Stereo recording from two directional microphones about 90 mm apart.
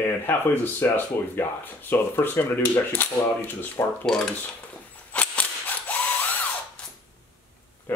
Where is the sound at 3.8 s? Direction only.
35° left (ahead or behind).